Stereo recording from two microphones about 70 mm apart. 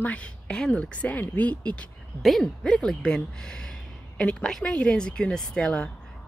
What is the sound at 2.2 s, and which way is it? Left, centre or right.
Speech, centre.